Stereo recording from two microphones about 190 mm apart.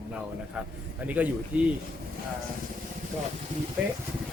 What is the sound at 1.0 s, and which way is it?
Speech, 10° right (ahead or behind).